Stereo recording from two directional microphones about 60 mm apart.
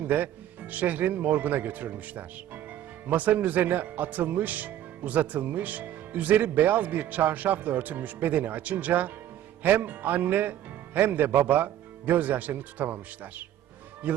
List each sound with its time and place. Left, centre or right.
0.7 s speech: right